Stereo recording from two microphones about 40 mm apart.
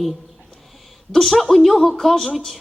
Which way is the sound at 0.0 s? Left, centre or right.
Centre.